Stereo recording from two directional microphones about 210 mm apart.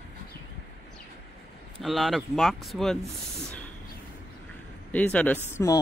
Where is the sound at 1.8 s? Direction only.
Centre (ahead or behind).